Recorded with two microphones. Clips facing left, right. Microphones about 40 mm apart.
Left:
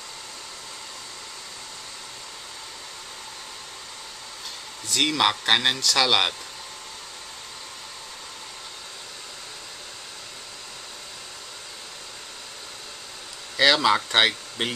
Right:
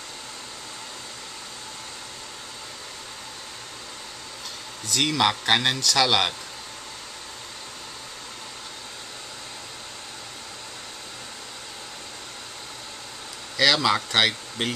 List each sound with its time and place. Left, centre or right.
4.8 s speech: centre
13.6 s speech: centre